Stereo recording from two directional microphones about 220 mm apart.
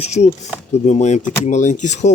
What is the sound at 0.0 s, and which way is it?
Speech, 30° left (ahead or behind).